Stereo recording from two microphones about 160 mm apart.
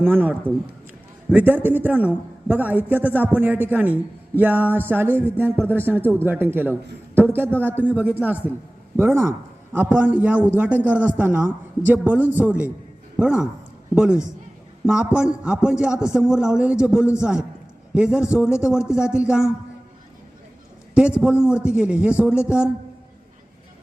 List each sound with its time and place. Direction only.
0.0 s a man's voice: 10° right (ahead or behind)
20.9 s a man's voice: 5° right (ahead or behind)